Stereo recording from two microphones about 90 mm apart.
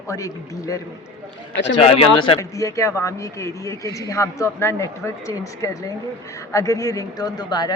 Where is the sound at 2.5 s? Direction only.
35° left (ahead or behind).